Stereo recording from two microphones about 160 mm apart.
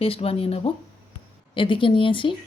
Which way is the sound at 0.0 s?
35° left (ahead or behind).